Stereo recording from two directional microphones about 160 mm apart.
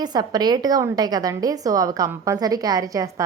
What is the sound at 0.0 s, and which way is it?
A woman's voice, 25° right (ahead or behind).